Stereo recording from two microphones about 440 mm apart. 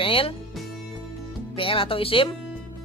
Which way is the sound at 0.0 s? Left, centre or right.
Centre.